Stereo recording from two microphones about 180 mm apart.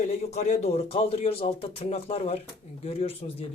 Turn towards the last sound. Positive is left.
turn(degrees=35)  # may be behind; listen again after turning